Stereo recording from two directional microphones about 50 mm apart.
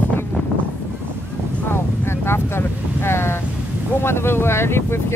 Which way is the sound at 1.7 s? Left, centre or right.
Left.